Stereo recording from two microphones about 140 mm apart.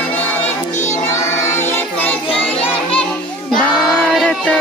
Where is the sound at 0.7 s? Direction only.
60° left (ahead or behind).